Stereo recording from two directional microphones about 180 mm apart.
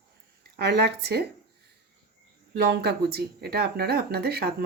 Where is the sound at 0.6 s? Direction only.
65° right (ahead or behind).